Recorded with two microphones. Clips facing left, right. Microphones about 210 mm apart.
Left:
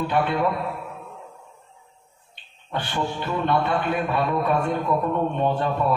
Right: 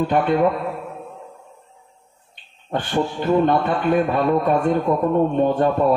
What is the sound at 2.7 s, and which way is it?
Music, 45° right (ahead or behind).